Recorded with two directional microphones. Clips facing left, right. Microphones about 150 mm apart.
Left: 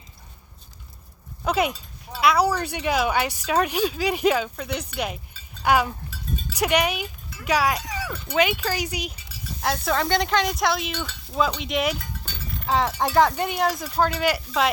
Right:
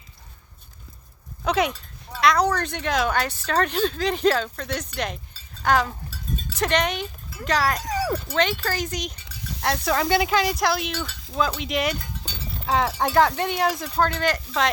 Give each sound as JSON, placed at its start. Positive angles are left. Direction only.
{"t": 1.5, "sound": "speech", "side_deg": 5}
{"t": 7.9, "sound": "wind chime", "side_deg": -40}
{"t": 8.3, "sound": "speech", "side_deg": 10}